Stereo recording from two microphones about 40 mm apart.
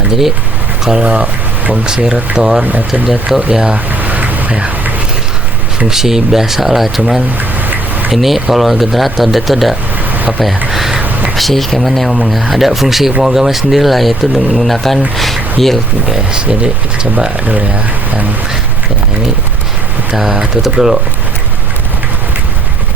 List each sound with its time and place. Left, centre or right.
1.0 s speech: right
1.7 s speech: right
2.6 s speech: right
3.3 s speech: centre
4.0 s vehicle: right
5.9 s speech: centre
8.1 s speech: centre
10.2 s a sound: right
10.7 s a sound: centre
11.3 s speech: centre
15.1 s a sound: centre
15.6 s speech: centre
16.0 s speech: centre
20.7 s speech: centre